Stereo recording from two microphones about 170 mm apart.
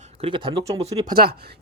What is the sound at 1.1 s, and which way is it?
Speech, 65° right (ahead or behind).